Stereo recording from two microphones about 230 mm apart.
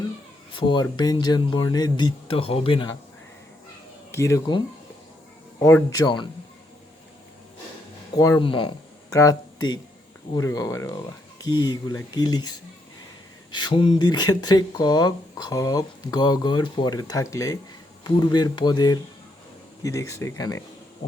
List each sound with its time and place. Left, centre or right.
0.5 s speech: left
4.1 s speech: centre
8.1 s speech: centre
13.5 s speech: centre